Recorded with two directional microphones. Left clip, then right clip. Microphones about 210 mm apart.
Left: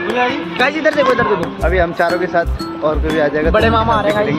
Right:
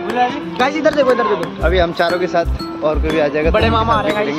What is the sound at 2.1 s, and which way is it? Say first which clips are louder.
Speech: left 1 dB; centre (ahead or behind).